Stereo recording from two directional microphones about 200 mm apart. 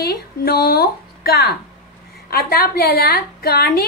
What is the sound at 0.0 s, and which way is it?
A woman's voice, 50° left (ahead or behind).